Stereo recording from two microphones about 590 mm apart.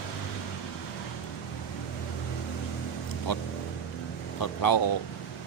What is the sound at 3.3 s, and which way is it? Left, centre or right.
Speech, left.